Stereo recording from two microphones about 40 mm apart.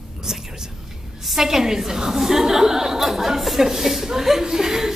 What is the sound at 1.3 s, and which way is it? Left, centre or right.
A woman's voice, centre.